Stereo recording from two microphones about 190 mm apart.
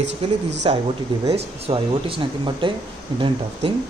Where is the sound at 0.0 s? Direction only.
65° right (ahead or behind).